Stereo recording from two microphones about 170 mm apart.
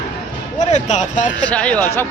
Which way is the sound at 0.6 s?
45° left (ahead or behind).